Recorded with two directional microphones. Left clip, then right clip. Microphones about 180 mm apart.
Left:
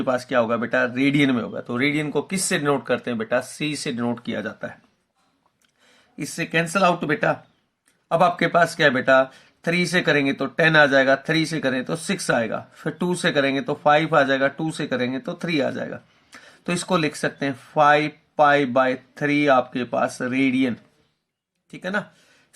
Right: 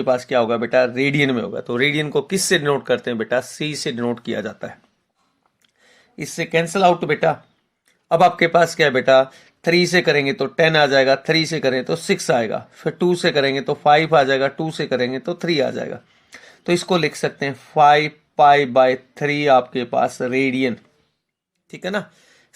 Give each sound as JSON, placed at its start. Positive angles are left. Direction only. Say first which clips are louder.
{"t": 0.0, "sound": "speech", "louder": "right 3 dB", "side_deg": -20}
{"t": 6.3, "sound": "speech", "louder": "right 3 dB", "side_deg": -20}